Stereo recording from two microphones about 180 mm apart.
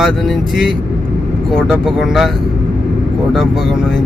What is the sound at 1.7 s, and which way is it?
Speech, centre (ahead or behind).